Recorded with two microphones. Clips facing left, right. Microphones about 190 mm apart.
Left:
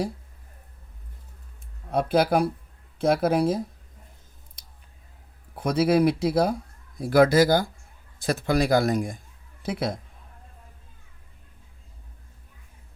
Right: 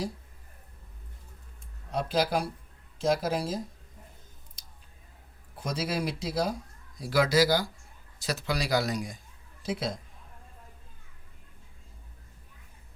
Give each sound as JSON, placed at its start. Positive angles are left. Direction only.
{"t": 1.9, "sound": "speech", "side_deg": 55}
{"t": 4.6, "sound": "a sound", "side_deg": 60}
{"t": 5.5, "sound": "a man's voice", "side_deg": 60}